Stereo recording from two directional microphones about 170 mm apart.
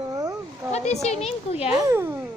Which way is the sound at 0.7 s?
40° left (ahead or behind).